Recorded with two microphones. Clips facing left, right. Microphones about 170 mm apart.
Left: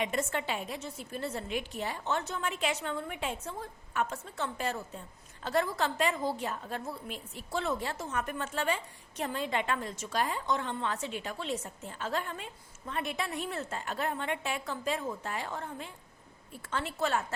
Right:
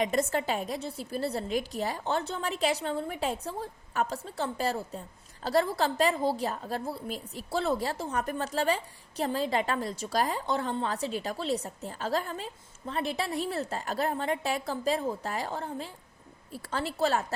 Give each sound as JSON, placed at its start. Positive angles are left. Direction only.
{"t": 0.0, "sound": "a woman's voice", "side_deg": -35}